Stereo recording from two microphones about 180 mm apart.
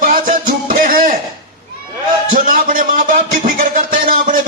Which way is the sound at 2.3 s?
50° right (ahead or behind).